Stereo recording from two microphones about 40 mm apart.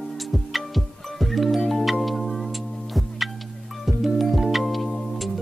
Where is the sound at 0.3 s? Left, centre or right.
Centre.